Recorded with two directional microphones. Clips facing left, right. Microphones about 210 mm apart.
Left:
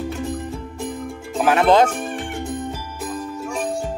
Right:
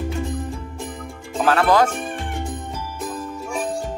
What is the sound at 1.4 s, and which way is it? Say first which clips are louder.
Speech: left 2 dB; 15° left (ahead or behind).